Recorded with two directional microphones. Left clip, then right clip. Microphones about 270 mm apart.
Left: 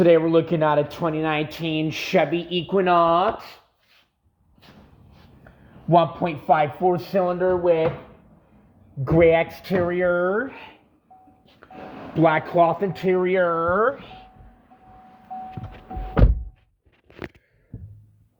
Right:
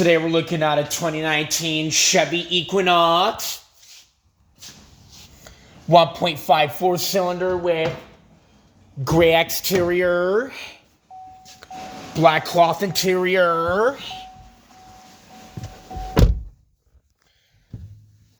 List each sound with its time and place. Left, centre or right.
0.0 s speech: centre
2.6 s a man's voice: centre
5.9 s a man's voice: centre
9.0 s a man's voice: centre
12.2 s speech: right